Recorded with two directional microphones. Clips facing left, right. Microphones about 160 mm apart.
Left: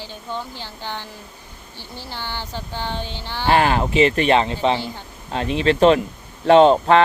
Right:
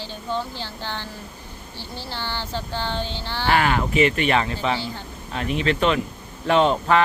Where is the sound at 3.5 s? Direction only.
30° left (ahead or behind).